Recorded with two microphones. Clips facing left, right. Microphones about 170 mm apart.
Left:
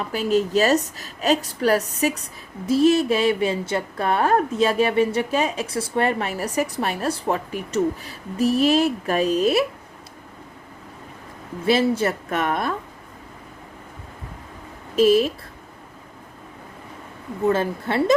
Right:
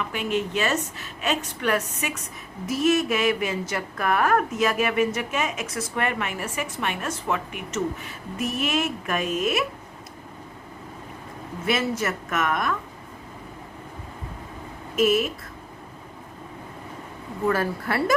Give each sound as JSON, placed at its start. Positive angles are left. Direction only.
{"t": 0.0, "sound": "speech", "side_deg": 35}
{"t": 11.6, "sound": "speech", "side_deg": 30}
{"t": 14.9, "sound": "speech", "side_deg": 30}
{"t": 17.4, "sound": "speech", "side_deg": 25}